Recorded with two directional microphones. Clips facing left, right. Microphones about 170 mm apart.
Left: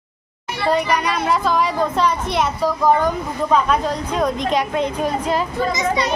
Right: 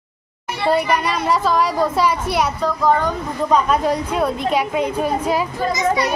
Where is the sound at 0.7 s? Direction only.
5° right (ahead or behind).